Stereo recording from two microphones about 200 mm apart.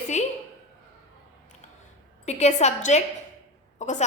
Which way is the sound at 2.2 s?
35° left (ahead or behind).